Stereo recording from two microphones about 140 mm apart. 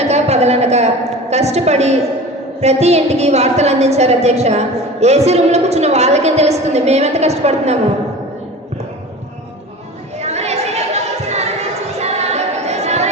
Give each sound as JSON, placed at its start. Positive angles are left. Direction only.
{"t": 0.0, "sound": "a sound", "side_deg": -50}
{"t": 2.6, "sound": "a woman's voice", "side_deg": -50}
{"t": 10.2, "sound": "chatter", "side_deg": -50}